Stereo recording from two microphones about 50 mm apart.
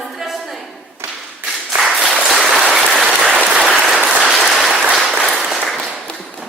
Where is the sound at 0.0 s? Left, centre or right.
Centre.